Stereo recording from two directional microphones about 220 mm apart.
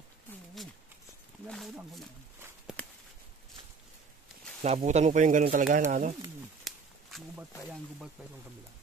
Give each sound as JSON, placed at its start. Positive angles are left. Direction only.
{"t": 1.5, "sound": "speech", "side_deg": 0}
{"t": 2.6, "sound": "walk", "side_deg": 5}
{"t": 4.7, "sound": "speech", "side_deg": -30}
{"t": 6.6, "sound": "a sound", "side_deg": 0}